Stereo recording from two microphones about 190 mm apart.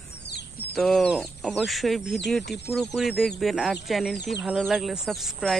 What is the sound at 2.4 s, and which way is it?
Speech, 60° left (ahead or behind).